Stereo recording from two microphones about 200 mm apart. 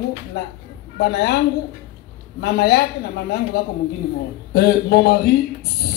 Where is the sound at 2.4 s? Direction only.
55° left (ahead or behind).